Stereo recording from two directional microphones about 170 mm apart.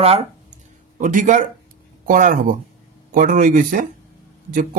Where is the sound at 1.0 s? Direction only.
50° right (ahead or behind).